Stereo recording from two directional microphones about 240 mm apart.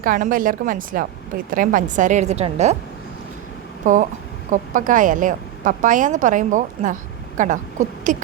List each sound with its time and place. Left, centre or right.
0.0 s a woman's voice: right
3.9 s a woman's voice: right